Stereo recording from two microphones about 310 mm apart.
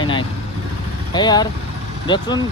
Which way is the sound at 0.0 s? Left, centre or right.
Centre.